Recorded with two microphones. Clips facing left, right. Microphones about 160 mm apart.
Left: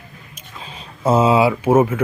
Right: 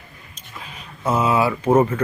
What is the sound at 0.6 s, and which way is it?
Speech, 30° left (ahead or behind).